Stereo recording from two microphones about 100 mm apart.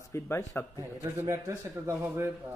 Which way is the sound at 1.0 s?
25° right (ahead or behind).